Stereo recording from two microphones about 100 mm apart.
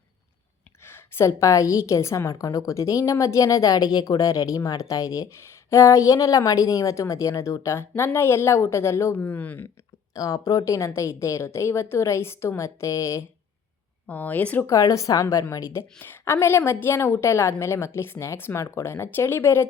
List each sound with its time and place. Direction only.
0.9 s a woman's voice: 25° left (ahead or behind)
9.1 s speech: 15° left (ahead or behind)
10.2 s a woman's voice: 40° left (ahead or behind)
14.1 s speech: 15° left (ahead or behind)
14.7 s a woman's voice: 35° left (ahead or behind)